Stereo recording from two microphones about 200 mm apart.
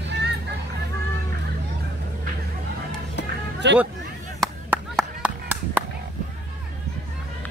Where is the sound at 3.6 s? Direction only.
60° right (ahead or behind).